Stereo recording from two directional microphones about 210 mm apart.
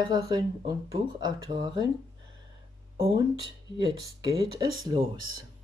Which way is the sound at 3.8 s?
20° right (ahead or behind).